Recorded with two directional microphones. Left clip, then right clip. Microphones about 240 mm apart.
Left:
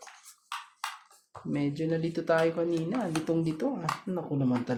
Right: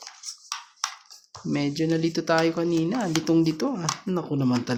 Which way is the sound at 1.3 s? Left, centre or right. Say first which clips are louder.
Right 5 dB; right.